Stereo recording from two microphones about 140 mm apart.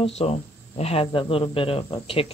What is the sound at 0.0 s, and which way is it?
Speech, 50° left (ahead or behind).